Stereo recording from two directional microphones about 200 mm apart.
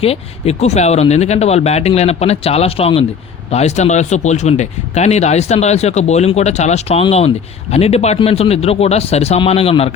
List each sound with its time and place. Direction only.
0.0 s speech: 30° left (ahead or behind)